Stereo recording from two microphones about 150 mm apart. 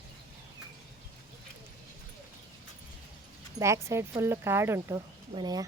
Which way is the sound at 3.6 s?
20° right (ahead or behind).